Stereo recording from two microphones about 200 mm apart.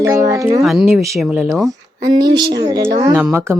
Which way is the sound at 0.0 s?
15° right (ahead or behind).